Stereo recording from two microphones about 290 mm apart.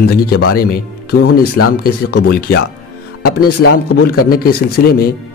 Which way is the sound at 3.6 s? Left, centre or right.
Left.